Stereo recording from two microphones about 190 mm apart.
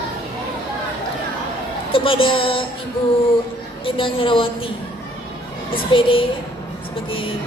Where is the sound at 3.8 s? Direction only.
25° left (ahead or behind).